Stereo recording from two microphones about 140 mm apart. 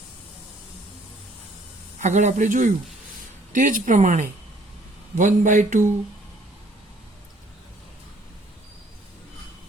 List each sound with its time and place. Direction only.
2.0 s speech: 60° right (ahead or behind)